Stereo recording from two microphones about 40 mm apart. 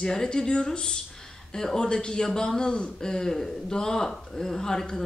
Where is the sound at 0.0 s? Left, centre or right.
Centre.